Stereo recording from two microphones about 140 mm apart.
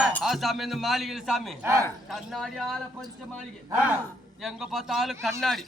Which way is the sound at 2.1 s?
Centre (ahead or behind).